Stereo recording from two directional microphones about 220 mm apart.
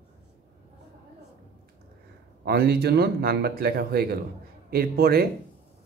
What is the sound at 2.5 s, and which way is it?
Speech, 45° right (ahead or behind).